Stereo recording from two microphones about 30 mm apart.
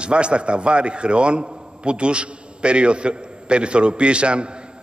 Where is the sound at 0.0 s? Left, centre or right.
Right.